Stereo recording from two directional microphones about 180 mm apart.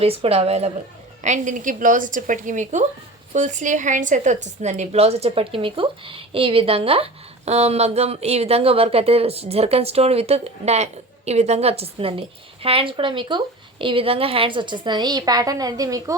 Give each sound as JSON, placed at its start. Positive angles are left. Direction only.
{"t": 0.0, "sound": "a woman's voice", "side_deg": -35}